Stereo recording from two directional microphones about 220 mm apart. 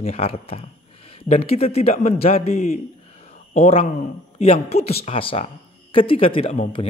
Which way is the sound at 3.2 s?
30° left (ahead or behind).